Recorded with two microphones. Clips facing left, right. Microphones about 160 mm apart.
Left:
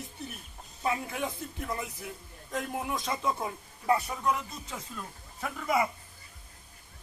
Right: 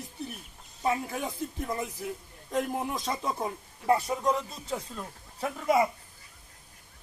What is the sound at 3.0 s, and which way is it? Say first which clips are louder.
Speech: even; 35° right (ahead or behind).